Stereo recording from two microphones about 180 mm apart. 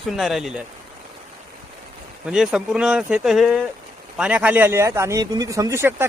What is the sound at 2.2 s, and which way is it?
A man's voice, 5° right (ahead or behind).